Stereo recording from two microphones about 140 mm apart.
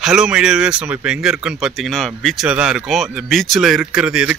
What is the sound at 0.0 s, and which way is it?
Speech, 5° right (ahead or behind).